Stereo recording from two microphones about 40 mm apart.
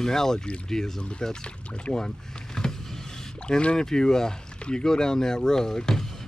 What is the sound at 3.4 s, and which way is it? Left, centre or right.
Speech, left.